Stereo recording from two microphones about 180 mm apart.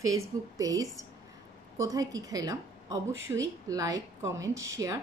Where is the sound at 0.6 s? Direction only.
20° right (ahead or behind).